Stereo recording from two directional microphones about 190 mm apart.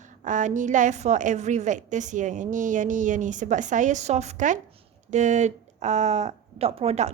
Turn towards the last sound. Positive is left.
turn(degrees=-35)  # may be behind; listen again after turning